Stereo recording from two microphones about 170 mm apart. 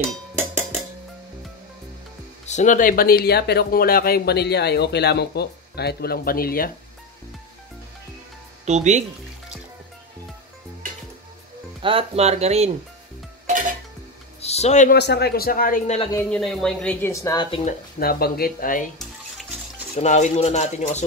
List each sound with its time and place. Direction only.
0.4 s music: 15° right (ahead or behind)
2.4 s speech: 45° left (ahead or behind)
8.6 s speech: 45° right (ahead or behind)
11.8 s speech: 30° right (ahead or behind)
13.5 s music: 50° right (ahead or behind)
14.4 s music: 40° left (ahead or behind)
14.9 s speech: 80° left; by 15.8 s 60° left (ahead or behind)
16.3 s speech: 5° left (ahead or behind)
17.1 s speech: 20° left (ahead or behind)
17.9 s speech: 60° left (ahead or behind)
20.0 s speech: 45° left (ahead or behind)